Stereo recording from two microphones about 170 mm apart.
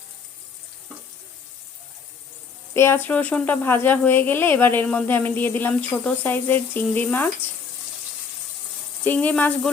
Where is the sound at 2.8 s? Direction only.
15° left (ahead or behind).